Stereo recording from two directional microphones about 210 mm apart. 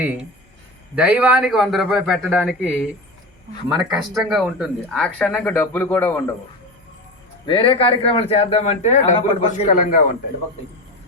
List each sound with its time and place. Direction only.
0.0 s speech: 5° right (ahead or behind)
3.8 s speech: centre (ahead or behind)
7.4 s a man's voice: 25° left (ahead or behind); by 10.2 s 40° left (ahead or behind)